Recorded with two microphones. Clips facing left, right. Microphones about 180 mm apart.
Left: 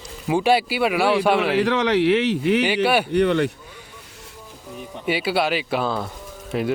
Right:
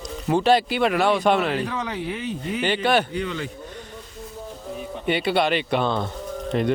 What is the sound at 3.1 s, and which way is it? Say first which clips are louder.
Speech: left 10 dB; 65° left (ahead or behind).